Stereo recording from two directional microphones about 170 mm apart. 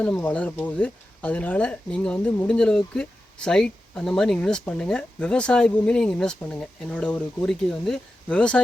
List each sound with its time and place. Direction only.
0.0 s speech: 10° left (ahead or behind)